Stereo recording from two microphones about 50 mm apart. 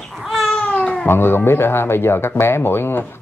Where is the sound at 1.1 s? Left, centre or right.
Left.